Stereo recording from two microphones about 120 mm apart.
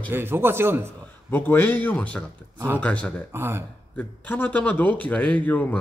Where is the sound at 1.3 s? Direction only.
15° left (ahead or behind).